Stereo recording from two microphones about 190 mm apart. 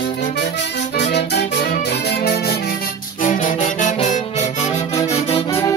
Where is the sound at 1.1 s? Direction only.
60° left (ahead or behind).